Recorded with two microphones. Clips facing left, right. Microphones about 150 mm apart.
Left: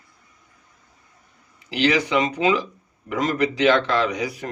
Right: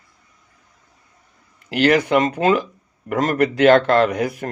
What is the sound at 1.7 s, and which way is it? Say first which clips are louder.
Speech: right 5 dB; 50° right (ahead or behind).